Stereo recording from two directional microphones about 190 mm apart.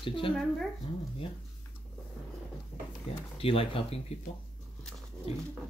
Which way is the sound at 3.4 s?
30° left (ahead or behind).